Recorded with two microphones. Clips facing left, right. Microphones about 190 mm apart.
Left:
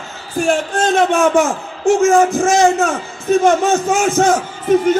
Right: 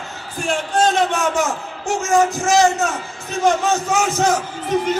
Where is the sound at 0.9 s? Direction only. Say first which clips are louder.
Left 6 dB; 50° left (ahead or behind).